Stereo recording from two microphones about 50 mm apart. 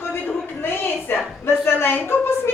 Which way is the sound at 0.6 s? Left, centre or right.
Left.